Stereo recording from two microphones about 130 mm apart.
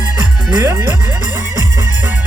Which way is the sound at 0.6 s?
25° right (ahead or behind).